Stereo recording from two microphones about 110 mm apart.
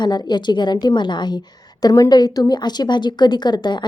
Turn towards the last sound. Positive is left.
turn(degrees=40)  # may be behind; listen again after turning